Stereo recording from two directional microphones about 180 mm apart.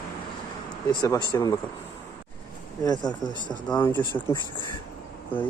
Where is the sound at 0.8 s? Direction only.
20° left (ahead or behind).